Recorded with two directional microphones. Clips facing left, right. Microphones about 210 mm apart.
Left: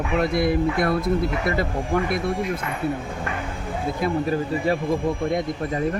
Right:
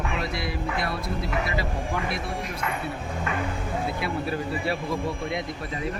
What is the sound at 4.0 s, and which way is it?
Speech, 40° left (ahead or behind).